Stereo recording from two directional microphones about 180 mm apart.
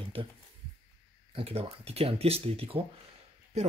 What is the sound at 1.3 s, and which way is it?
Speech, 30° right (ahead or behind).